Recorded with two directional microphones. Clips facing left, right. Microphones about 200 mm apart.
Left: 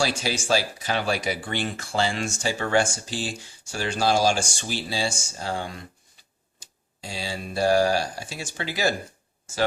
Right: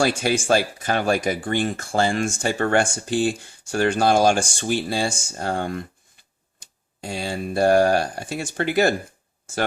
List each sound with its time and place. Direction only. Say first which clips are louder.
0.0 s speech: right 5 dB; 55° right (ahead or behind)